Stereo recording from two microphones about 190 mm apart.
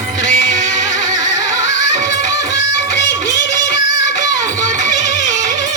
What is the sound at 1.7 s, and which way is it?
Music, 70° left (ahead or behind).